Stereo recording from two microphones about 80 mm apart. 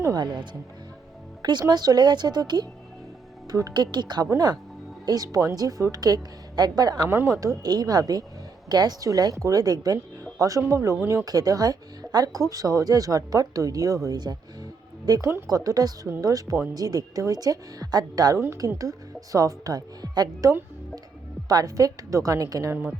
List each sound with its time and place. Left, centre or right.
0.1 s speech: right
3.8 s speech: right
5.0 s speech: right
7.1 s speech: right
7.3 s speech: right
15.2 s speech: right
15.4 s speech: right
18.3 s speech: right
18.8 s speech: right
21.5 s speech: right